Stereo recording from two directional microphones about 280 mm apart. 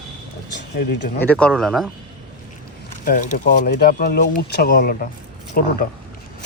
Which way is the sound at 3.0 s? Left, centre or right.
Left.